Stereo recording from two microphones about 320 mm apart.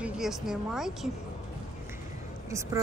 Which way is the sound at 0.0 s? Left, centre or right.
Centre.